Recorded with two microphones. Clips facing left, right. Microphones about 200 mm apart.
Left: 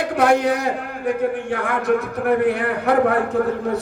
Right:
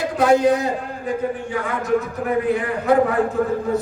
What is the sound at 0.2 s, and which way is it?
A man's voice, 65° left (ahead or behind).